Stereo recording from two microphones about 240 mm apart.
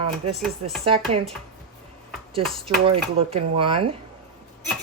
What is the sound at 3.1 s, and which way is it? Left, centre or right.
Speech, right.